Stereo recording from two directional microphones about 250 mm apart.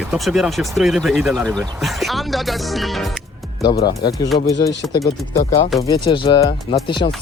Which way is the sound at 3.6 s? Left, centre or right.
Centre.